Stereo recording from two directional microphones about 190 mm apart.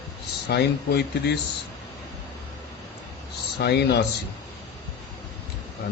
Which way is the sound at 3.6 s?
60° left (ahead or behind).